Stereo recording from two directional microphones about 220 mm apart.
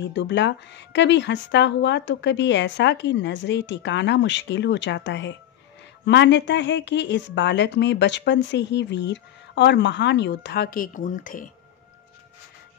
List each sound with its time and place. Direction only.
0.0 s a woman's voice: 55° left (ahead or behind); by 11.4 s 35° left (ahead or behind)